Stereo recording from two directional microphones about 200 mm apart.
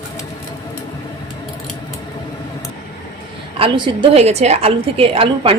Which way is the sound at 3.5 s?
25° right (ahead or behind).